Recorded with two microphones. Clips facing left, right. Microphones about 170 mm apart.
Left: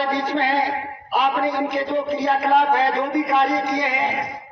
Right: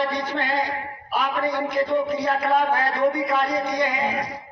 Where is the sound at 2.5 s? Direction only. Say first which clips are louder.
Left 5 dB; 85° left.